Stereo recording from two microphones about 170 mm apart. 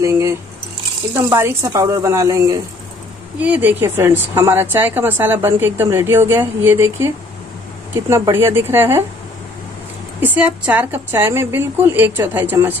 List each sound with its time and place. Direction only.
0.0 s squish: 15° right (ahead or behind)
1.3 s a woman's voice: 15° right (ahead or behind)
10.2 s a woman's voice: 10° right (ahead or behind)